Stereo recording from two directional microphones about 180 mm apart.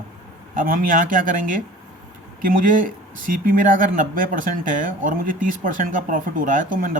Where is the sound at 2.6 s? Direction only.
45° right (ahead or behind).